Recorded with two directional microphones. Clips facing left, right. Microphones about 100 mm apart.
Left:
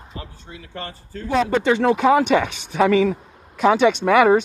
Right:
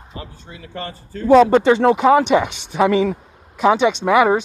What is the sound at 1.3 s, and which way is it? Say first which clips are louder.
Speech: right 9 dB; 40° right (ahead or behind).